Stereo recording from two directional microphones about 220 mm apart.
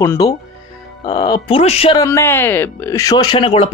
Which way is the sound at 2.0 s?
10° left (ahead or behind).